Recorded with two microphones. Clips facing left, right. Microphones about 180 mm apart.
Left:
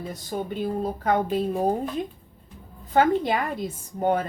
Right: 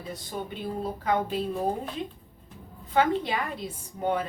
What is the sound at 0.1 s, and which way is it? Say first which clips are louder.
A woman's voice: left 2 dB; 45° left (ahead or behind).